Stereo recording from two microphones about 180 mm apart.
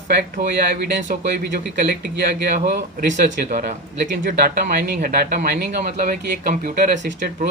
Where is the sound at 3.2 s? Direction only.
45° right (ahead or behind).